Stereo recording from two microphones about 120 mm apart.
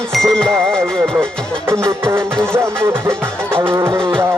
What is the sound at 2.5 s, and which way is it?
Music, 20° right (ahead or behind).